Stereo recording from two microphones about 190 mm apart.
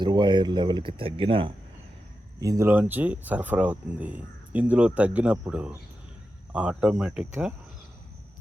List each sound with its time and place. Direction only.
0.0 s speech: 25° right (ahead or behind)
2.4 s speech: 15° right (ahead or behind)